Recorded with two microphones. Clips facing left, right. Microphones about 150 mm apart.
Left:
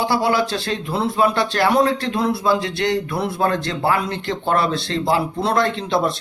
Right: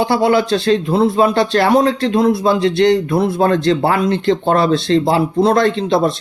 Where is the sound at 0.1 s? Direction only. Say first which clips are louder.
Right 5 dB; 25° right (ahead or behind).